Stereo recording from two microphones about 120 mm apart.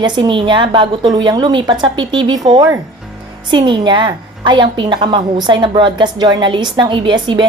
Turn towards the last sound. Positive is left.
turn(degrees=-40)  # may be behind; listen again after turning